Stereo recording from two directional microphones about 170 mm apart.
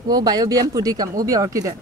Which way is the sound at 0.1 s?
25° right (ahead or behind).